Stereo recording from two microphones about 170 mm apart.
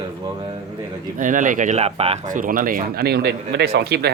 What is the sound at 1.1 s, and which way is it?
Speech, 50° right (ahead or behind).